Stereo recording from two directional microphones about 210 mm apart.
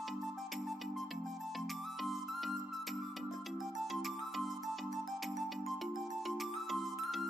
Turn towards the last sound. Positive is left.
turn(degrees=0)  # may be behind; listen again after turning